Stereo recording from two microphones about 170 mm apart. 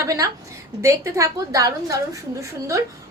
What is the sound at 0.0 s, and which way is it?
A woman's voice, 20° right (ahead or behind).